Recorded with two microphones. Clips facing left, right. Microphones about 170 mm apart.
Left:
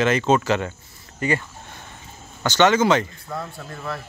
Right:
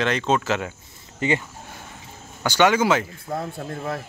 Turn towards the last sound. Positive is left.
turn(degrees=-45)  # may be behind; listen again after turning